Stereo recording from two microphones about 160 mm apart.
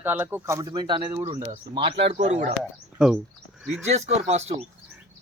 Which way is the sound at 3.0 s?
Centre (ahead or behind).